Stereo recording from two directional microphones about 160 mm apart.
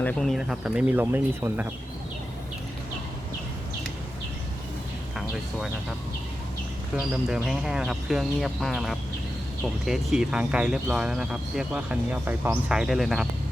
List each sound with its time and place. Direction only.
0.0 s speech: 5° left (ahead or behind); by 1.6 s 10° right (ahead or behind)
5.1 s a sound: centre (ahead or behind)
7.1 s speech: 5° right (ahead or behind)